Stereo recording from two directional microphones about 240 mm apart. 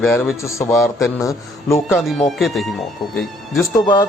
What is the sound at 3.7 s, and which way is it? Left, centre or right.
Speech, centre.